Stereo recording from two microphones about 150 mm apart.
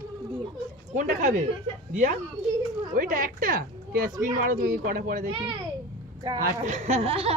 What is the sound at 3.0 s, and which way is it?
A woman's voice, 70° right (ahead or behind).